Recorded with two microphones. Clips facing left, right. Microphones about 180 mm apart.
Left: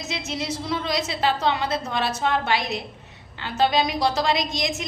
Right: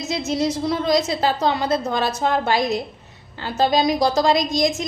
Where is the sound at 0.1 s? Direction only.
40° right (ahead or behind).